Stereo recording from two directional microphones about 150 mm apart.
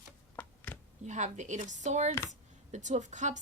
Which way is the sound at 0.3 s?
10° left (ahead or behind).